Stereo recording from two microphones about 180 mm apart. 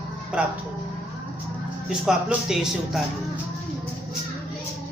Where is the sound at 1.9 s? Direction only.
5° right (ahead or behind).